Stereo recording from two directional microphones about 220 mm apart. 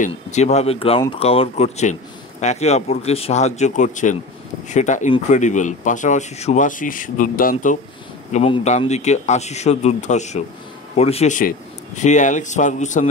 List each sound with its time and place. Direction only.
0.0 s speech: 30° left (ahead or behind)